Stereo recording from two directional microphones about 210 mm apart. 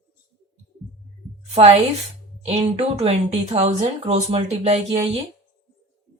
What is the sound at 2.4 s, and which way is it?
Speech, 30° right (ahead or behind).